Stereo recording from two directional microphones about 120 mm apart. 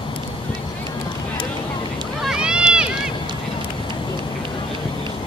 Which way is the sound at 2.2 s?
5° right (ahead or behind).